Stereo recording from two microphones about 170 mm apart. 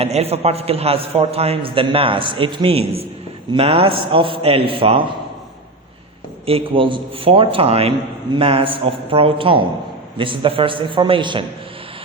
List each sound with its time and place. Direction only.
0.0 s a man's voice: 35° right (ahead or behind)
6.4 s a man's voice: 30° right (ahead or behind)